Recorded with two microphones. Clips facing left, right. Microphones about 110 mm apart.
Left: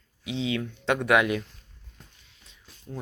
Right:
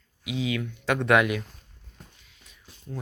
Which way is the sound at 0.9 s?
15° left (ahead or behind).